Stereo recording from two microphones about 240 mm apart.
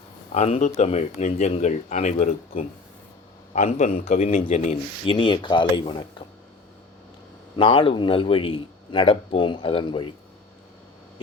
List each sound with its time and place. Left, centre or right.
0.3 s a man's voice: left
7.5 s a man's voice: left